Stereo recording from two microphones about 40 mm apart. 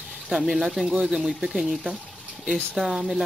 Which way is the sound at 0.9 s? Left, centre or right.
Centre.